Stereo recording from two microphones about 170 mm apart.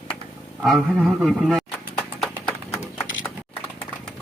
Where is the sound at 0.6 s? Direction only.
Centre (ahead or behind).